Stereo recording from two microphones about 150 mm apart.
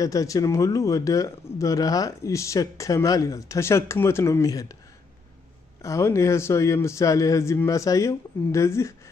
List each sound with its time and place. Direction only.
0.0 s speech: 25° left (ahead or behind)
5.8 s speech: 20° left (ahead or behind)